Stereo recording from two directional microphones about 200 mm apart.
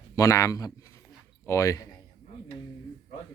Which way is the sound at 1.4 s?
15° left (ahead or behind).